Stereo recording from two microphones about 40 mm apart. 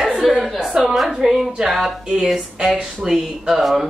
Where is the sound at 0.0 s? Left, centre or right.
Centre.